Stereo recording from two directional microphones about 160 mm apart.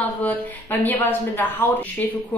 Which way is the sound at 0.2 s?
10° left (ahead or behind).